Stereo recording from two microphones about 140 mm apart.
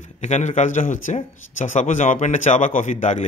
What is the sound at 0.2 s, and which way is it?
A man's voice, 55° left (ahead or behind).